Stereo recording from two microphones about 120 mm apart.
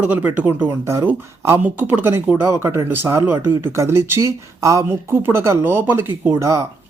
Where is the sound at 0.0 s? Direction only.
15° right (ahead or behind).